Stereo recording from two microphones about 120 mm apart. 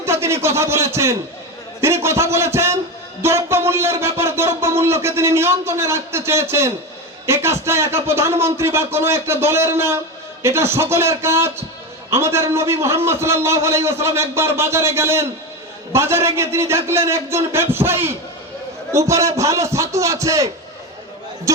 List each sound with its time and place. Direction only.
0.0 s speech: 20° right (ahead or behind)